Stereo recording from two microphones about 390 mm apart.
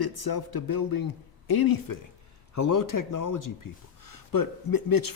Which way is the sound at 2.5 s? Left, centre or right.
Left.